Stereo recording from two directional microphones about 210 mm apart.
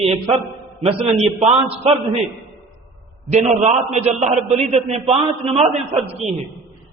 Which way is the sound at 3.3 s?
30° right (ahead or behind).